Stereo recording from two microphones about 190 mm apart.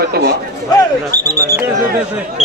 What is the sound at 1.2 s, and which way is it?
Speech, 20° right (ahead or behind).